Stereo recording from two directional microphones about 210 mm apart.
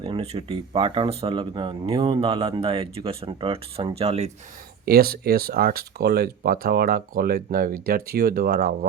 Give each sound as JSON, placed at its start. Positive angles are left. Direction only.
{"t": 0.0, "sound": "speech", "side_deg": -25}
{"t": 4.9, "sound": "speech", "side_deg": -45}